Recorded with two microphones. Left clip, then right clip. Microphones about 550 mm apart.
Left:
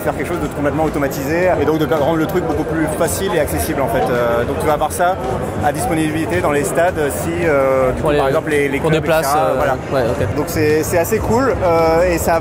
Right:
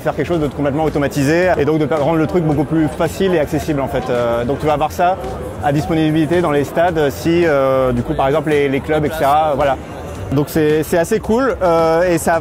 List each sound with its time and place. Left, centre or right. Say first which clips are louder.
1.7 s a man's voice: even; right
3.0 s speech: right 1 dB; right
8.2 s a man's voice: right 5 dB; right